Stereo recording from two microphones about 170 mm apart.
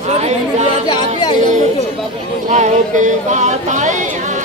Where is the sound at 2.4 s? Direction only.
45° right (ahead or behind).